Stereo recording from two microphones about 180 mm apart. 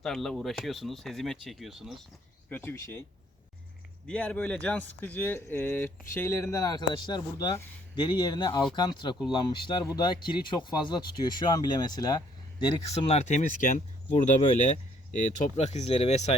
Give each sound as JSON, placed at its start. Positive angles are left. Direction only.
{"t": 0.0, "sound": "speech", "side_deg": 5}
{"t": 2.5, "sound": "speech", "side_deg": 10}
{"t": 4.0, "sound": "speech", "side_deg": 5}